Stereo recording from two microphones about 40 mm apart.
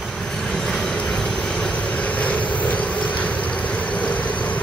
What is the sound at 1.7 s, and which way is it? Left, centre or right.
Vehicle, left.